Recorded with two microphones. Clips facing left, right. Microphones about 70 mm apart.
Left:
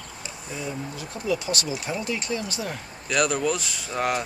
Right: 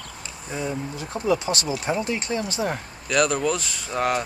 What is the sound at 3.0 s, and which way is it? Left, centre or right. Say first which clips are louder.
Speech: right 2 dB; centre.